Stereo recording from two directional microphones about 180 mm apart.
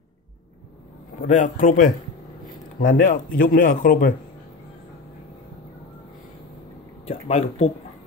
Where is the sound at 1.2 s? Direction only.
45° left (ahead or behind).